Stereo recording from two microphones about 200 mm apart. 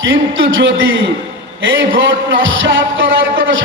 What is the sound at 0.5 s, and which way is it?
A man's voice, 70° right (ahead or behind).